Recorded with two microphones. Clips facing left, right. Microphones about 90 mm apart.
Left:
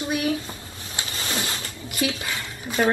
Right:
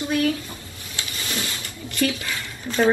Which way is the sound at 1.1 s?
30° left (ahead or behind).